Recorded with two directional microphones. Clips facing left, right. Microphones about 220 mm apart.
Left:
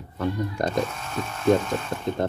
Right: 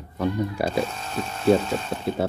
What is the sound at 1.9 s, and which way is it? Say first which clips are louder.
Speech: right 1 dB; 10° right (ahead or behind).